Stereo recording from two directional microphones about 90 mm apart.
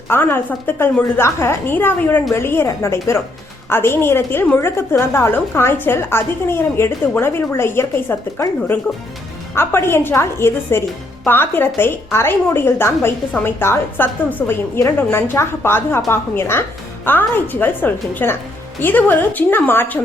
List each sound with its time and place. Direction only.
0.1 s a woman's voice: 25° left (ahead or behind)